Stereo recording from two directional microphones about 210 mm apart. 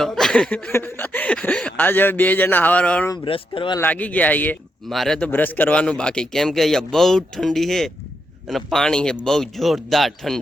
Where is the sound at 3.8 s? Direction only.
5° left (ahead or behind).